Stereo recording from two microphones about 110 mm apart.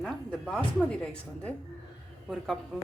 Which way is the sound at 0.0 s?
10° left (ahead or behind).